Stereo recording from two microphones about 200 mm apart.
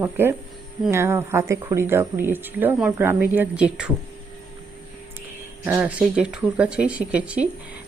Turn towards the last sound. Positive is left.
turn(degrees=-5)  # may be behind; listen again after turning